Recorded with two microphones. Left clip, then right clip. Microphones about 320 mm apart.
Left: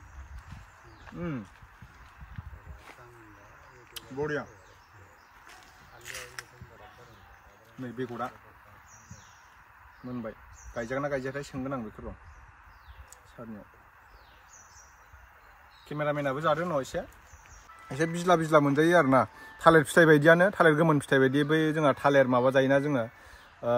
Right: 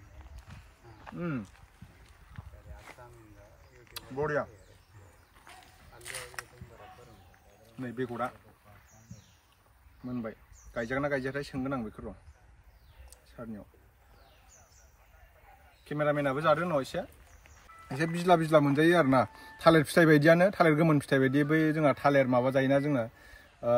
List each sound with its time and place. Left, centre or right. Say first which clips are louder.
1.0 s speech: even; centre
4.2 s speech: right 1 dB; right
6.0 s a sound: even; centre
7.8 s speech: right 1 dB; centre
10.2 s speech: left 1 dB; centre
13.4 s speech: right 1 dB; centre
15.9 s a man's voice: right 1 dB; centre